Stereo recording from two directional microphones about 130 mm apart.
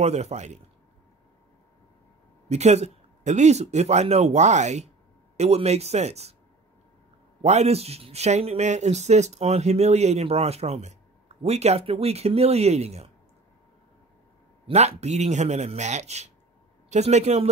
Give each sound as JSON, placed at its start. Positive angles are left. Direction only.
{"t": 0.0, "sound": "a man's voice", "side_deg": -55}
{"t": 2.5, "sound": "a man's voice", "side_deg": -55}
{"t": 7.4, "sound": "a man's voice", "side_deg": -55}
{"t": 14.7, "sound": "a man's voice", "side_deg": -55}